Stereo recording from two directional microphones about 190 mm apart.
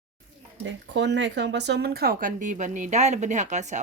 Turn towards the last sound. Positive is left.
turn(degrees=-40)  # may be behind; listen again after turning